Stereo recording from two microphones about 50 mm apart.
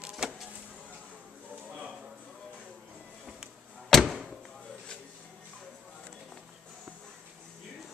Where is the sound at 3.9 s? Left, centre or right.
Centre.